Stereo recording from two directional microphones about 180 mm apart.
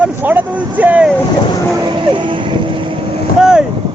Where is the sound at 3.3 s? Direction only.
5° right (ahead or behind).